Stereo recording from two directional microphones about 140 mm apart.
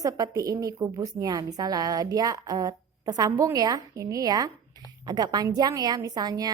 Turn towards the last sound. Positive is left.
turn(degrees=-25)  # may be behind; listen again after turning